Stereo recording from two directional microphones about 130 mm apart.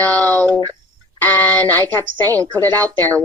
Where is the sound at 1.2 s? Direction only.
15° left (ahead or behind).